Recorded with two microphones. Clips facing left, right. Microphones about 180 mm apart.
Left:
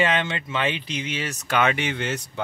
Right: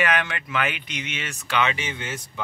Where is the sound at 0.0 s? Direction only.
25° left (ahead or behind).